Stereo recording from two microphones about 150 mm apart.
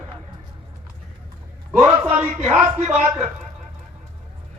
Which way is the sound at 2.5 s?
40° right (ahead or behind).